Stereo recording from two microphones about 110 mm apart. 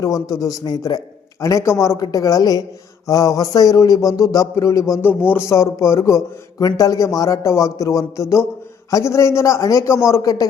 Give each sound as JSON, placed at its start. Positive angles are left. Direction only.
{"t": 0.0, "sound": "a woman's voice", "side_deg": 35}